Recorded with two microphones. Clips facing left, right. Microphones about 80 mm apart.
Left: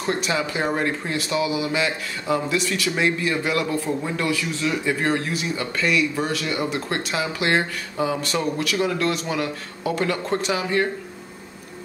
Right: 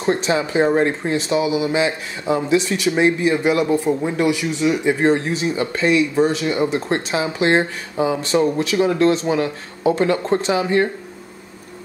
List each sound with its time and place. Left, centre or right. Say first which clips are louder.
0.0 s speech: right 5 dB; right